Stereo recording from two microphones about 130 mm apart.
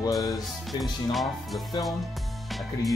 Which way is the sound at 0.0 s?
25° left (ahead or behind).